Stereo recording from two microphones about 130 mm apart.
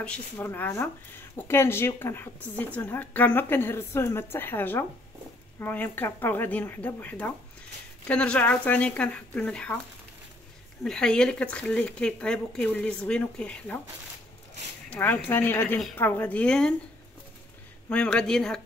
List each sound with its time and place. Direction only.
0.4 s speech: 20° left (ahead or behind)
10.8 s speech: 5° left (ahead or behind)
14.9 s speech: 15° left (ahead or behind)
17.8 s speech: 10° left (ahead or behind)